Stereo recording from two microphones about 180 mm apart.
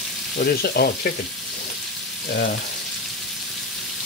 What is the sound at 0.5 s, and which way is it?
Frying, 60° left (ahead or behind).